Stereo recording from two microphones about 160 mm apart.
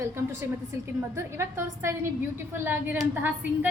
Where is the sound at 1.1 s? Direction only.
15° right (ahead or behind).